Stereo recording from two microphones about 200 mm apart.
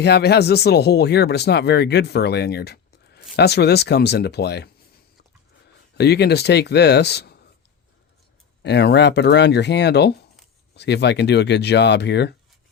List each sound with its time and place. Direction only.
0.0 s speech: 55° left (ahead or behind)
6.0 s speech: 55° left (ahead or behind)
8.6 s speech: 55° left (ahead or behind)